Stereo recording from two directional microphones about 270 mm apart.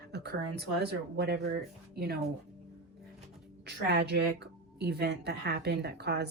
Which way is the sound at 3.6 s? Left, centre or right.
Right.